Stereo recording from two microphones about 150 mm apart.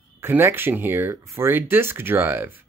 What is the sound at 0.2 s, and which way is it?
Speech, 15° right (ahead or behind).